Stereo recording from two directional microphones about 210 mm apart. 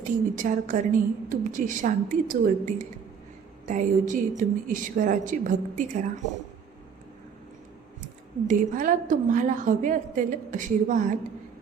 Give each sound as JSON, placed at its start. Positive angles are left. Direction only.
{"t": 0.0, "sound": "a woman's voice", "side_deg": -35}
{"t": 8.4, "sound": "a woman's voice", "side_deg": -40}